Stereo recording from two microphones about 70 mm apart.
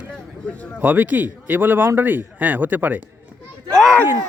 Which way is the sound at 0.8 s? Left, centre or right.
Right.